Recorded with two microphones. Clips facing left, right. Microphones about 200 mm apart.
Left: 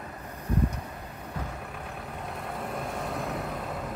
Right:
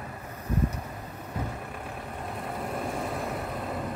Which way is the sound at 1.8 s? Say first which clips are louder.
Right 1 dB; centre (ahead or behind).